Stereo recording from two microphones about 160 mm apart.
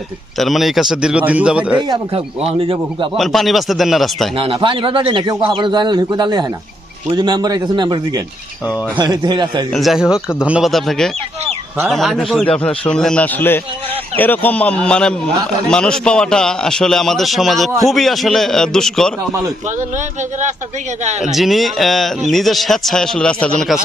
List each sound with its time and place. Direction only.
0.3 s speech: centre (ahead or behind)
1.9 s a man's voice: 35° right (ahead or behind)
3.2 s speech: centre (ahead or behind)
4.4 s a man's voice: 35° right (ahead or behind)
9.7 s a man's voice: centre (ahead or behind)
21.0 s speech: 45° right (ahead or behind)
21.2 s speech: centre (ahead or behind)